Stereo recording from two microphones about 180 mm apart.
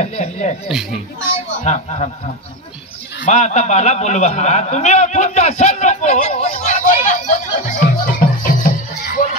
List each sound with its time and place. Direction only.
0.0 s speech: 40° left (ahead or behind)
0.7 s speech: 5° right (ahead or behind)
1.6 s speech: 40° left (ahead or behind)
3.3 s a man's voice: 40° left (ahead or behind)
7.6 s music: 45° left (ahead or behind)